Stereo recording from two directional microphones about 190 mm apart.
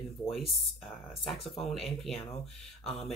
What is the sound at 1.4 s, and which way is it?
Speech, 30° left (ahead or behind).